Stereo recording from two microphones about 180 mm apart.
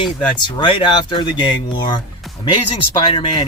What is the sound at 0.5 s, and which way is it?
Speech, 25° left (ahead or behind).